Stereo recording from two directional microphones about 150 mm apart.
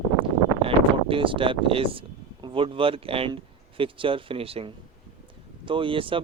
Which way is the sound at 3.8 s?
35° right (ahead or behind).